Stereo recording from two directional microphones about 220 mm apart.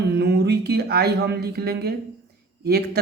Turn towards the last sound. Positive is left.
turn(degrees=-45)  # may be behind; listen again after turning